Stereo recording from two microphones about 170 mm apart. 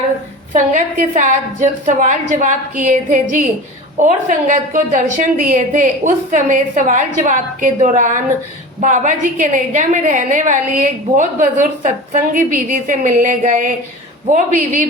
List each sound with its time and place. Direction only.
0.5 s a woman's voice: 50° right (ahead or behind)